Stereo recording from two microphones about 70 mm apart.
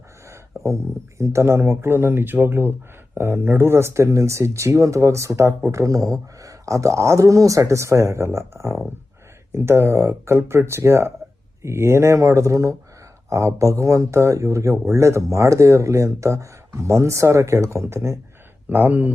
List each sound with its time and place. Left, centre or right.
0.3 s a sound: right
1.2 s speech: right
18.7 s speech: right